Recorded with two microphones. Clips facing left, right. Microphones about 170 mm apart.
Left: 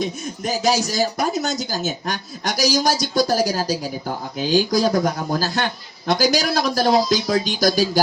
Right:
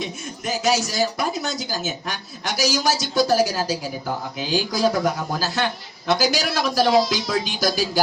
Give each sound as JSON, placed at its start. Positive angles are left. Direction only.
{"t": 0.0, "sound": "speech", "side_deg": 40}